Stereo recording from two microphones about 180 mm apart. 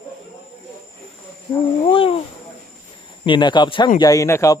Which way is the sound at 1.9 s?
30° left (ahead or behind).